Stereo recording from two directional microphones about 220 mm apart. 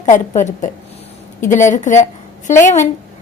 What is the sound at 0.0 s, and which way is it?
A woman's voice, 35° left (ahead or behind).